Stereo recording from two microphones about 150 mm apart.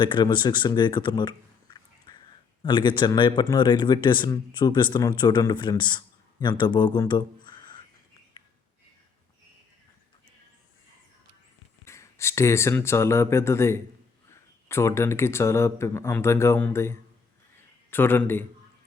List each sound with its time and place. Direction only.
0.0 s a man's voice: 30° left (ahead or behind)
8.4 s a sound: 30° left (ahead or behind)
11.9 s speech: 20° left (ahead or behind)